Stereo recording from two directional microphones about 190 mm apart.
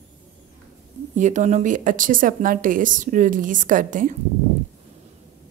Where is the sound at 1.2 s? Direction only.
40° right (ahead or behind).